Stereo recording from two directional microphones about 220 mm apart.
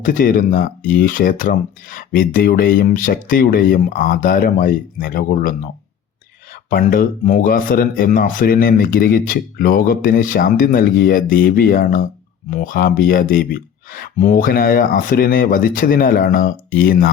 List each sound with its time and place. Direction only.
0.0 s speech: 40° left (ahead or behind)